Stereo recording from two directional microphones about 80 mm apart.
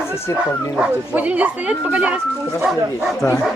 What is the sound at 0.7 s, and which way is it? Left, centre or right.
Speech, centre.